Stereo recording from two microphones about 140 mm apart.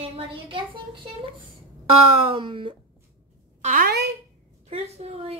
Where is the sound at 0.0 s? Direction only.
40° right (ahead or behind).